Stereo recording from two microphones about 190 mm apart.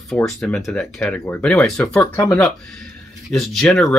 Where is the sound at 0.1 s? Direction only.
Centre (ahead or behind).